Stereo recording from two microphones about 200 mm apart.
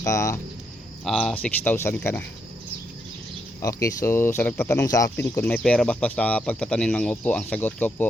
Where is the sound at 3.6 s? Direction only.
15° left (ahead or behind).